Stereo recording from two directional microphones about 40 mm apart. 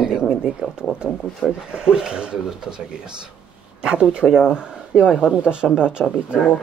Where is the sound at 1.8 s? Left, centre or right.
Right.